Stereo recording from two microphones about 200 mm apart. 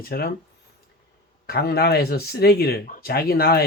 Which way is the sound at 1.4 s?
50° left (ahead or behind).